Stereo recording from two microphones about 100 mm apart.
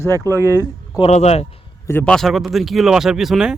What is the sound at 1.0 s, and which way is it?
Speech, 90° left.